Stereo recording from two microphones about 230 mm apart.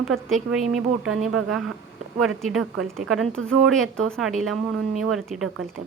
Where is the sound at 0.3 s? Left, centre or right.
Centre.